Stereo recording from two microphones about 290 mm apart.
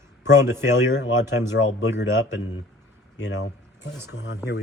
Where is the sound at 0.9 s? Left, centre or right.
Left.